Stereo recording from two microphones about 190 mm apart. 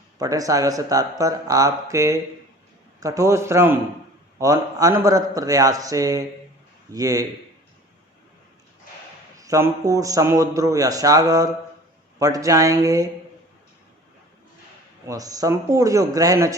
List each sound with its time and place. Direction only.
0.2 s a man's voice: 20° right (ahead or behind)
9.4 s a man's voice: 15° right (ahead or behind)
15.0 s a man's voice: 20° right (ahead or behind)